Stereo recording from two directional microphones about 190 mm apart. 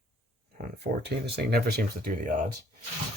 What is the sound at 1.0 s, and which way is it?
Speech, 60° right (ahead or behind).